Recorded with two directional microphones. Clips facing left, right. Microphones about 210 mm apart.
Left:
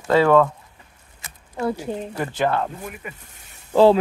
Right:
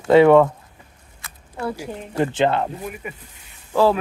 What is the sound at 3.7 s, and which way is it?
Speech, 25° left (ahead or behind).